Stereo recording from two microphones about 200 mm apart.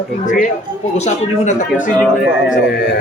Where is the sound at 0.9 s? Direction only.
35° left (ahead or behind).